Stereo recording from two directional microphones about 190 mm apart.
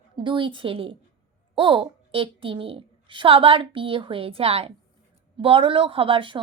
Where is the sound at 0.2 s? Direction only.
25° right (ahead or behind).